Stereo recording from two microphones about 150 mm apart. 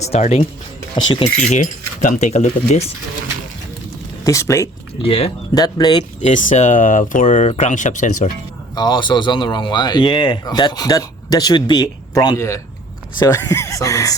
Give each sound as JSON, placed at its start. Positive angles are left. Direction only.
{"t": 0.0, "sound": "speech", "side_deg": 45}
{"t": 1.0, "sound": "speech", "side_deg": 35}
{"t": 1.4, "sound": "speech", "side_deg": 55}
{"t": 4.3, "sound": "speech", "side_deg": 20}
{"t": 5.0, "sound": "speech", "side_deg": 40}
{"t": 5.5, "sound": "speech", "side_deg": 25}
{"t": 6.2, "sound": "speech", "side_deg": 55}
{"t": 8.7, "sound": "speech", "side_deg": 25}